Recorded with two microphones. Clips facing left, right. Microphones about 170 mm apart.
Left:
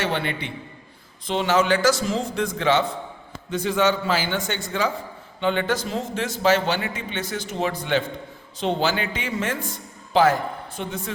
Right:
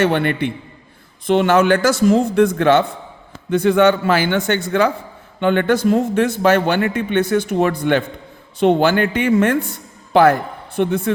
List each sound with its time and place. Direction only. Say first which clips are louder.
0.0 s speech: right 9 dB; 55° right (ahead or behind)